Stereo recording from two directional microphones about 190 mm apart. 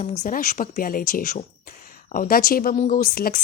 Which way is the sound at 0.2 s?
45° left (ahead or behind).